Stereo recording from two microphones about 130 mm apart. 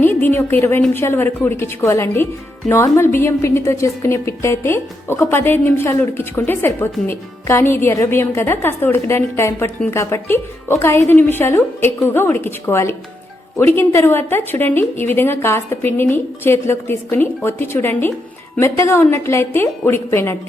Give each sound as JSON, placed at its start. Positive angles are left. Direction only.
{"t": 0.0, "sound": "a woman's voice", "side_deg": 15}